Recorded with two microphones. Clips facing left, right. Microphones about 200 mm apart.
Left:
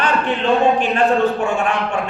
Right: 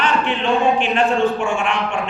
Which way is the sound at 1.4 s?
40° left (ahead or behind).